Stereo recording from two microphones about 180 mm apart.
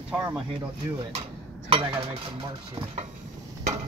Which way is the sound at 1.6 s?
30° right (ahead or behind).